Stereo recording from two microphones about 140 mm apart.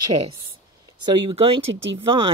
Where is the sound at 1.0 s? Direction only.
40° right (ahead or behind).